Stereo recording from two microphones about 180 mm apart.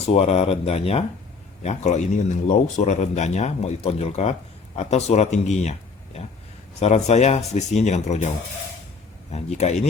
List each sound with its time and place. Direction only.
0.0 s speech: 35° left (ahead or behind)
6.7 s speech: 35° left (ahead or behind)
9.3 s speech: 40° left (ahead or behind)